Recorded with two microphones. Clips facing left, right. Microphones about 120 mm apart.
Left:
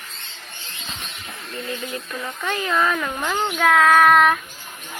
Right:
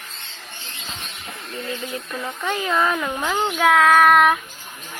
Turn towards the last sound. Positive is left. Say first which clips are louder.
# even
turn(degrees=-5)  # may be behind; listen again after turning